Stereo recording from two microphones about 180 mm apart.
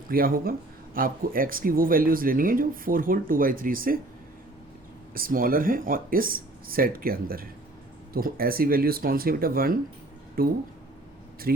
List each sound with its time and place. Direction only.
0.1 s speech: 55° right (ahead or behind)
5.1 s speech: 50° right (ahead or behind)